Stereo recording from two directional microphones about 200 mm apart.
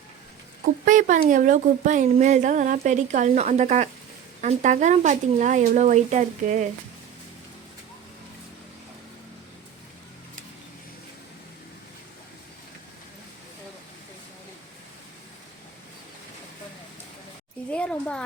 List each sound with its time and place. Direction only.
0.6 s speech: 40° right (ahead or behind)
17.7 s speech: 5° left (ahead or behind)